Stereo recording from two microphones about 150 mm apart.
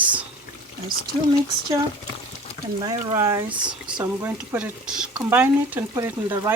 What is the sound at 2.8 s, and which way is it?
Speech, 30° right (ahead or behind).